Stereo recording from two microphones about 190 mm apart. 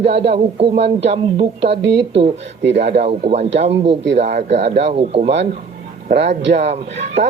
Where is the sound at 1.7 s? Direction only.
70° right (ahead or behind).